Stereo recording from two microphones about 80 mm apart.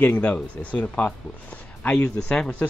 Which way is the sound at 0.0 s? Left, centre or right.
Centre.